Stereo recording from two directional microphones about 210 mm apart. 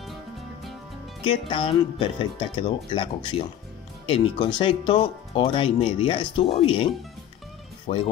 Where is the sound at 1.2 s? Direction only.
25° left (ahead or behind).